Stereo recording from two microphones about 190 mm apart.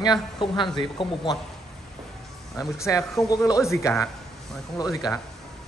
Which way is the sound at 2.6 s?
15° left (ahead or behind).